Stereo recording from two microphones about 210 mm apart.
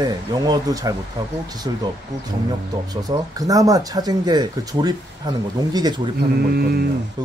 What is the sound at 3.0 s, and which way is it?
Speech, 15° right (ahead or behind).